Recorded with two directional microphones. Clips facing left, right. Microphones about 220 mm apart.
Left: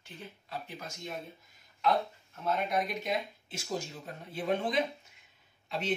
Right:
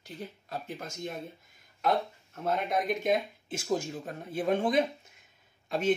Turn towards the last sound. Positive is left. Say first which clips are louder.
# right 8 dB
turn(degrees=-50)  # may be behind; listen again after turning